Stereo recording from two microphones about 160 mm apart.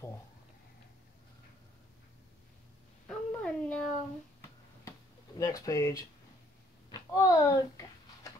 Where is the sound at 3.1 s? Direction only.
5° left (ahead or behind).